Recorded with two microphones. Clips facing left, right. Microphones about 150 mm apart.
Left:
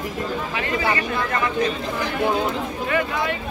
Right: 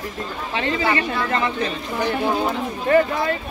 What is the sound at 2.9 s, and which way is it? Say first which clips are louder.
Speech: right 7 dB; 40° right (ahead or behind).